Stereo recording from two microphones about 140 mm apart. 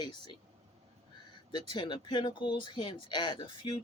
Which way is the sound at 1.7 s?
35° left (ahead or behind).